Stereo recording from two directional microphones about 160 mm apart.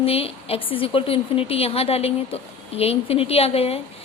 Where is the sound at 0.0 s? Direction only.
35° left (ahead or behind).